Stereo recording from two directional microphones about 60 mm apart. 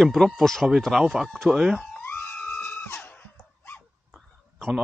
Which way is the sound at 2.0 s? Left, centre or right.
Left.